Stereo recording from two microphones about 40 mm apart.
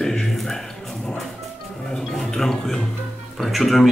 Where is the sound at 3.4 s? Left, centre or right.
Centre.